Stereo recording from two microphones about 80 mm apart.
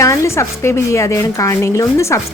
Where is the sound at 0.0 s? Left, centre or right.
Left.